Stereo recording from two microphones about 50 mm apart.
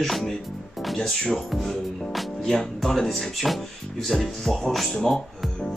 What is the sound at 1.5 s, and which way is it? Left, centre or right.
Speech, centre.